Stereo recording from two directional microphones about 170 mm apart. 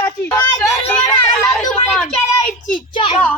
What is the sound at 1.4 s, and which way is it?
Speech, 5° left (ahead or behind).